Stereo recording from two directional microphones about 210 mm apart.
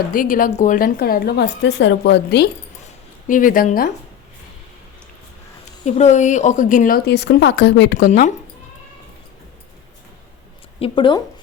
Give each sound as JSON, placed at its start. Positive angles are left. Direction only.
{"t": 0.1, "sound": "a woman's voice", "side_deg": 40}
{"t": 3.2, "sound": "speech", "side_deg": 40}
{"t": 5.8, "sound": "speech", "side_deg": 35}
{"t": 7.9, "sound": "speech", "side_deg": 40}
{"t": 10.8, "sound": "speech", "side_deg": 25}